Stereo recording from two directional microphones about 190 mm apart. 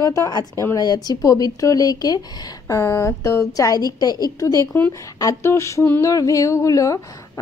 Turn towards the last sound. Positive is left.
turn(degrees=15)  # may be behind; listen again after turning